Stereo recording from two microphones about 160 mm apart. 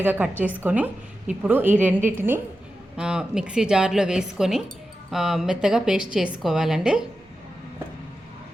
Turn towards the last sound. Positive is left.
turn(degrees=-5)  # may be behind; listen again after turning